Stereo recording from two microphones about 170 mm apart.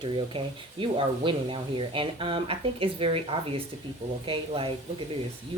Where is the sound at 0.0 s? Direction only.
30° right (ahead or behind).